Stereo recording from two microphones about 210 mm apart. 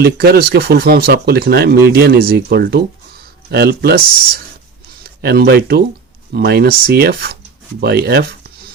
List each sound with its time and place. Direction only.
0.0 s speech: 50° right (ahead or behind)
5.0 s speech: 50° right (ahead or behind)